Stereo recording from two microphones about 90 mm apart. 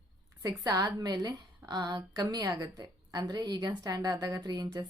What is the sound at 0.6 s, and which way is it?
A woman's voice, 40° right (ahead or behind).